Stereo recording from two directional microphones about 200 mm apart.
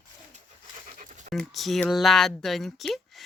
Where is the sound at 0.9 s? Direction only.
40° right (ahead or behind).